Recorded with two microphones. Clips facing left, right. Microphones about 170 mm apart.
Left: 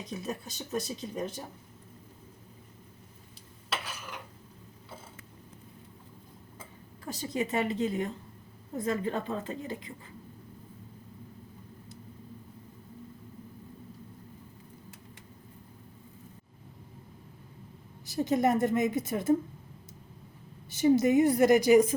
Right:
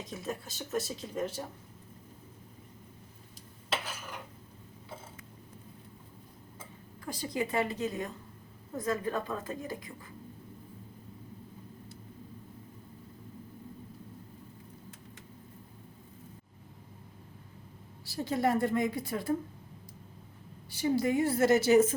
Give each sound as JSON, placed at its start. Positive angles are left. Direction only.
{"t": 0.1, "sound": "a woman's voice", "side_deg": 20}
{"t": 7.2, "sound": "a woman's voice", "side_deg": 25}
{"t": 18.0, "sound": "a woman's voice", "side_deg": 20}
{"t": 20.7, "sound": "a woman's voice", "side_deg": 20}